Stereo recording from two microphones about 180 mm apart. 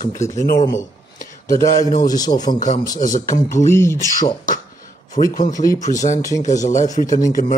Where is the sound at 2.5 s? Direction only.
50° left (ahead or behind).